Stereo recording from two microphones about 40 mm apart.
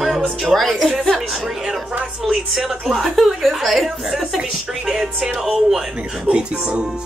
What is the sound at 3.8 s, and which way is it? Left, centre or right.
Speech, centre.